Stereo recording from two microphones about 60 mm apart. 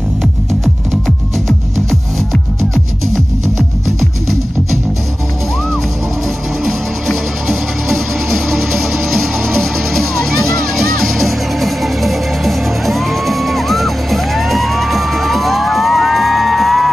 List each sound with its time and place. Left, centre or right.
7.4 s music: centre